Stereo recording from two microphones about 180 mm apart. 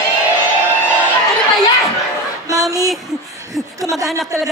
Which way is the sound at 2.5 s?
20° right (ahead or behind).